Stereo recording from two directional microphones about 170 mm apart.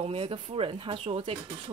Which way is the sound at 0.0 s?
35° right (ahead or behind).